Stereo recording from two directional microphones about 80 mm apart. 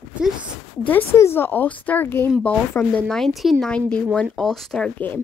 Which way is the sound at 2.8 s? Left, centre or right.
Centre.